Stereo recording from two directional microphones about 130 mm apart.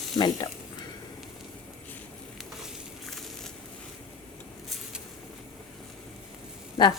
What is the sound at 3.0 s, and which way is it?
Crushing, centre (ahead or behind).